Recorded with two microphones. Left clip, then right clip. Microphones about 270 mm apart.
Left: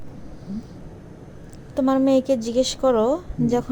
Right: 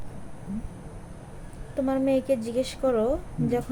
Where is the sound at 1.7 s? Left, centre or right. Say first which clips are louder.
Left 6 dB; centre.